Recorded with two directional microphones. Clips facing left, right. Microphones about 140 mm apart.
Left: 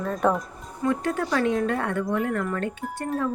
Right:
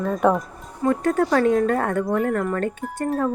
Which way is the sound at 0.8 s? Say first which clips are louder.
Right 5 dB; 45° right (ahead or behind).